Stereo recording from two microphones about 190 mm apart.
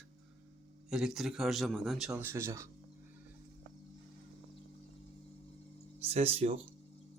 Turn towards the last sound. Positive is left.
turn(degrees=-30)  # may be behind; listen again after turning